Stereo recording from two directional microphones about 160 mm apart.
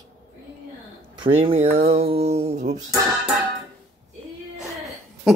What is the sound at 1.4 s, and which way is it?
Speech, 40° right (ahead or behind).